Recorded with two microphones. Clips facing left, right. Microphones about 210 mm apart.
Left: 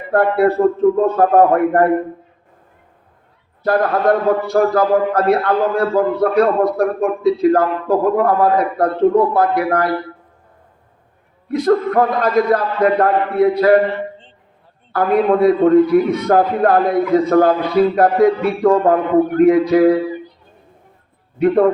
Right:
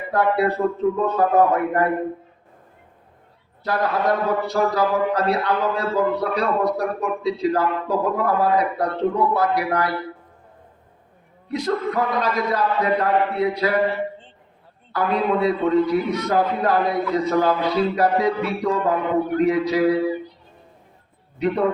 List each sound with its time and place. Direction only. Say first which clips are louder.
0.1 s a man's voice: left 6 dB; 50° left (ahead or behind)
3.6 s a man's voice: left 6 dB; 55° left (ahead or behind)
11.4 s a man's voice: left 8 dB; 55° left (ahead or behind)
14.9 s a man's voice: left 7 dB; 55° left (ahead or behind)
21.3 s a man's voice: left 8 dB; 55° left (ahead or behind)